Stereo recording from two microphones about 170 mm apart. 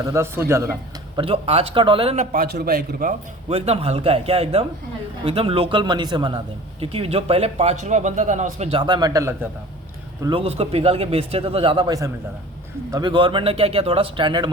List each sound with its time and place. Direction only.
0.0 s a man's voice: 15° right (ahead or behind)
1.2 s a man's voice: 35° right (ahead or behind)
2.3 s a man's voice: 65° right (ahead or behind)
3.5 s a man's voice: 35° right (ahead or behind); by 9.5 s 20° right (ahead or behind)
10.2 s a man's voice: 35° right (ahead or behind)